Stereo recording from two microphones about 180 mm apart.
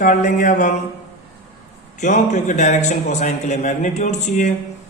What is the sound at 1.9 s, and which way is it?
A man's voice, 40° left (ahead or behind).